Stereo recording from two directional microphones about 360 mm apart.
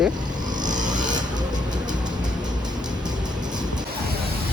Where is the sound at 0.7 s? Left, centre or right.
Centre.